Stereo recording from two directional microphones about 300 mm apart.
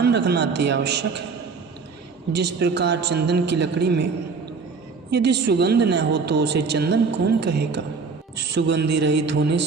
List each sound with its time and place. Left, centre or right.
0.0 s speech: right
2.3 s speech: right
5.1 s speech: right